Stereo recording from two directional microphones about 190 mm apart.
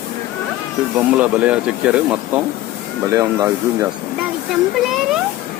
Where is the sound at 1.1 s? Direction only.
5° right (ahead or behind).